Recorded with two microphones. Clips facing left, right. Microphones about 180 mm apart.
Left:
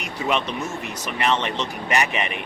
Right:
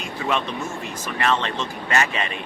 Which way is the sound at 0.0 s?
20° left (ahead or behind).